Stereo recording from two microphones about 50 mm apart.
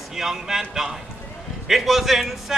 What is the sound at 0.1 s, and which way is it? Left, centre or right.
Speech, centre.